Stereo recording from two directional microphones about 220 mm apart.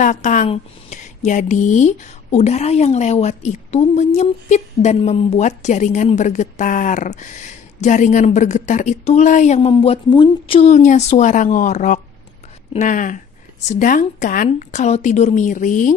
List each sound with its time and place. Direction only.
0.0 s speech: 35° left (ahead or behind)